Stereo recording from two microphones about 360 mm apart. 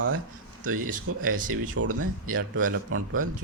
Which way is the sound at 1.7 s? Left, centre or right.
Right.